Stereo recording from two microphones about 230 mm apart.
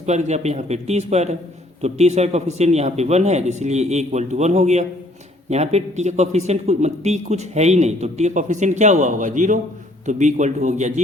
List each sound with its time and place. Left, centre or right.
0.0 s a man's voice: right